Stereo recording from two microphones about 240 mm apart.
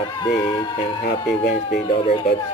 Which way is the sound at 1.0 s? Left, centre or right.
Left.